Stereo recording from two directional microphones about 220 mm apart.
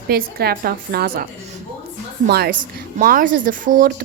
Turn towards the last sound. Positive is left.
turn(degrees=-35)  # may be behind; listen again after turning